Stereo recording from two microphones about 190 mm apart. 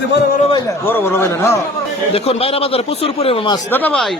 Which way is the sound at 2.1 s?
30° left (ahead or behind).